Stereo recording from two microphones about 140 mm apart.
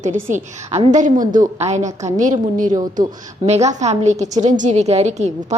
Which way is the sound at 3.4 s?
50° right (ahead or behind).